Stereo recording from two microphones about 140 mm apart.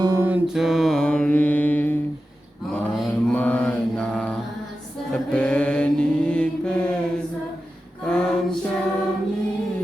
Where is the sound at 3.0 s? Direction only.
5° left (ahead or behind).